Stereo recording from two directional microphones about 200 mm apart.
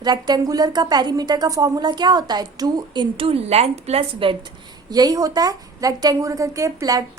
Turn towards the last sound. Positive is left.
turn(degrees=-15)  # may be behind; listen again after turning